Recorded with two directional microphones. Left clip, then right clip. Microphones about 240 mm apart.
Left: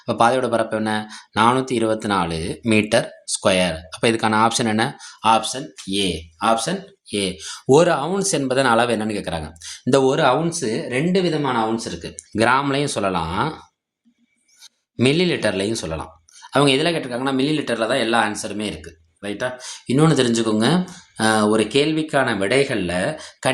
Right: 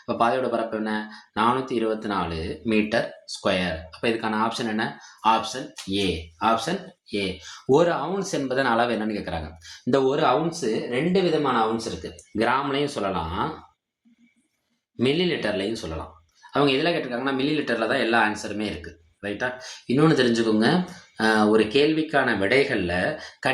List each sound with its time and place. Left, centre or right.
0.0 s speech: left
14.9 s speech: left